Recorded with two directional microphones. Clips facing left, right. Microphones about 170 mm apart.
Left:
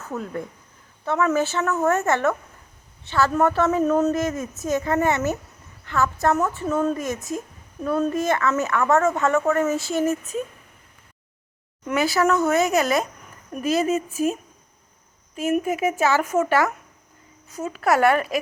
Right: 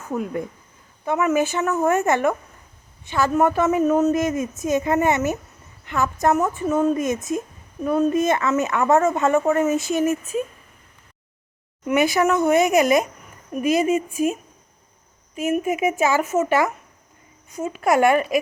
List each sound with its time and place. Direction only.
0.0 s a man's voice: 15° right (ahead or behind)
6.9 s a man's voice: 20° right (ahead or behind)
11.9 s a man's voice: 15° right (ahead or behind)
15.4 s a man's voice: 10° right (ahead or behind)